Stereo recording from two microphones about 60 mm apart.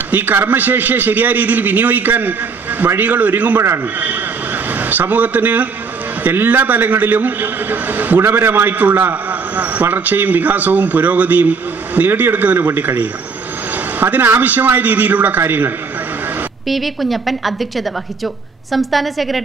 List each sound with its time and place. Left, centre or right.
0.1 s a man's voice: right
4.7 s a man's voice: right
16.6 s a woman's voice: centre